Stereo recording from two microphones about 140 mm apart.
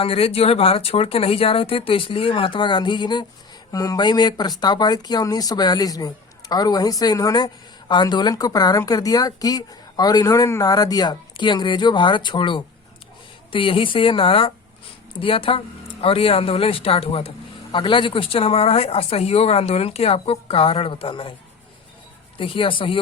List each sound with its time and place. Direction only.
0.0 s speech: 45° left (ahead or behind)
22.4 s speech: 40° left (ahead or behind)